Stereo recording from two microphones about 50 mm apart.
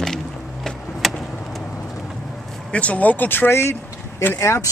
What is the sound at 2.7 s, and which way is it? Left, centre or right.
Speech, left.